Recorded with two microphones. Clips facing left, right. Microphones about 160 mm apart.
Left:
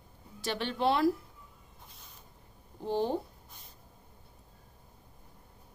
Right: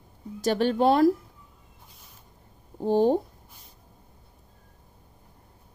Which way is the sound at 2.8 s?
45° right (ahead or behind).